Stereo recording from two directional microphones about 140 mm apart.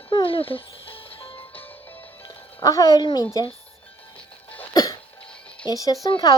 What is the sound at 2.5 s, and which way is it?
Speech, 25° left (ahead or behind).